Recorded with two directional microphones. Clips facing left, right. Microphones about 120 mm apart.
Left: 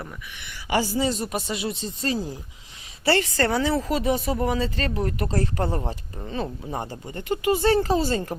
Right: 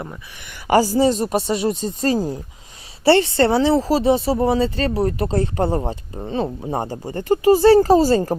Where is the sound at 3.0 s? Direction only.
30° right (ahead or behind).